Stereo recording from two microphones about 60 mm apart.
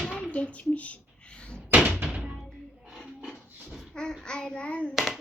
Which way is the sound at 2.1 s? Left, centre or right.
Centre.